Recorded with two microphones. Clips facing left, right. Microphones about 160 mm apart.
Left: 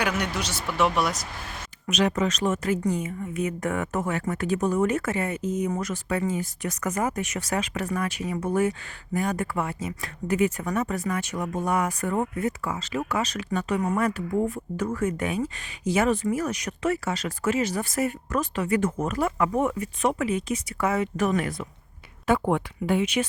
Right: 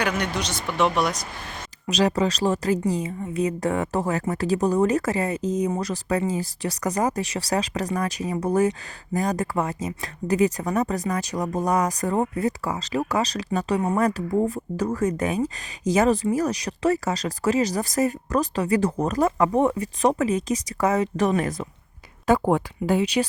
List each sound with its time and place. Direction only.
0.0 s speech: 5° left (ahead or behind)
1.9 s speech: 35° right (ahead or behind)